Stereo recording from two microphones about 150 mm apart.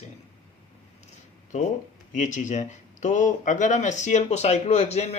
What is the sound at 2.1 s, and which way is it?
Speech, 55° left (ahead or behind).